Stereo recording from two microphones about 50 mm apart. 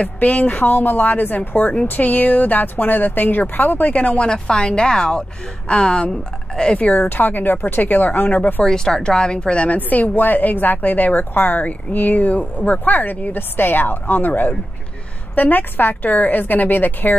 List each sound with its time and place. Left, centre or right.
0.0 s a woman's voice: left
4.3 s a woman's voice: centre
7.1 s a woman's voice: left
8.6 s a woman's voice: centre
9.8 s a woman's voice: left